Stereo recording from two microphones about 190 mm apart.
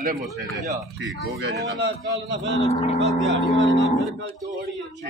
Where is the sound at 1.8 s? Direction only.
70° right (ahead or behind).